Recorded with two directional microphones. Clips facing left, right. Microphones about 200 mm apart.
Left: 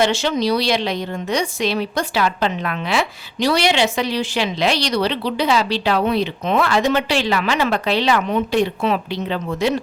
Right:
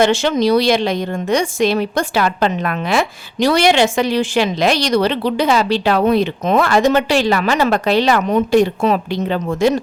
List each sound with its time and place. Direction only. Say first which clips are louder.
0.0 s a woman's voice: right 4 dB; 50° right (ahead or behind)